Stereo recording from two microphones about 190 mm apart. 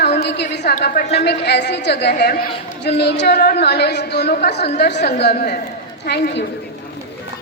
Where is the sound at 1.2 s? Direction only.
60° left (ahead or behind).